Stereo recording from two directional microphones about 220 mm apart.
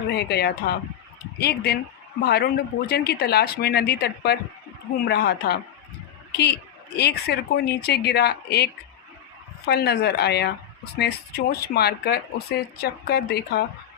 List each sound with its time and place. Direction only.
0.1 s speech: 50° left (ahead or behind)